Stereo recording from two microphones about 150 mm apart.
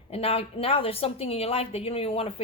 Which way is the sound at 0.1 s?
40° left (ahead or behind).